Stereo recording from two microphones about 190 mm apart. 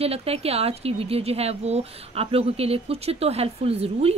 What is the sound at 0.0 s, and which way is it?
Speech, 30° right (ahead or behind).